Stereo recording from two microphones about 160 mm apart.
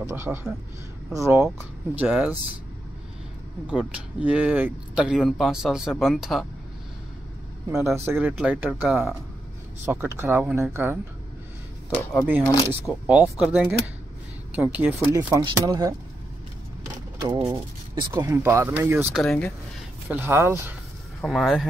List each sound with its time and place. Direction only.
0.0 s speech: 15° right (ahead or behind)
2.0 s speech: 10° right (ahead or behind)
3.7 s speech: 5° right (ahead or behind)
7.7 s speech: 15° right (ahead or behind)
12.8 s speech: 5° right (ahead or behind); by 15.9 s 25° right (ahead or behind)
16.8 s vehicle: 15° right (ahead or behind)
17.5 s speech: 20° right (ahead or behind)
19.1 s speech: 5° left (ahead or behind)
20.1 s speech: 15° right (ahead or behind)
21.2 s speech: centre (ahead or behind)